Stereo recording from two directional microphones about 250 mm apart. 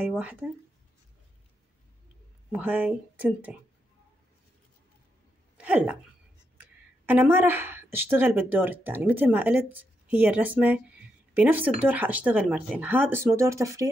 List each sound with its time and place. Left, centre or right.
0.0 s speech: centre
2.5 s speech: centre
5.6 s a woman's voice: centre